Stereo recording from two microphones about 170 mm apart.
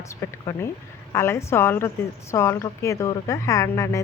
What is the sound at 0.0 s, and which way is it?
A woman's voice, 15° left (ahead or behind).